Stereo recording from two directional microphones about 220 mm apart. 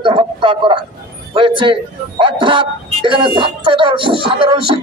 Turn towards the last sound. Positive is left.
turn(degrees=-25)  # may be behind; listen again after turning